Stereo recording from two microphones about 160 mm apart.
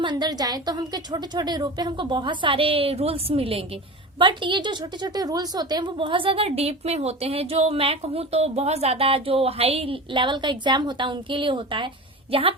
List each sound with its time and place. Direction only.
0.0 s a woman's voice: 30° right (ahead or behind)